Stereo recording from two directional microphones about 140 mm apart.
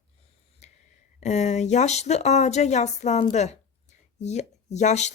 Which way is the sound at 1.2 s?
55° left (ahead or behind).